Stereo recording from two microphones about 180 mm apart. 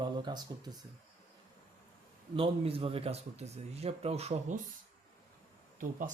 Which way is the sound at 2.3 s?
30° right (ahead or behind).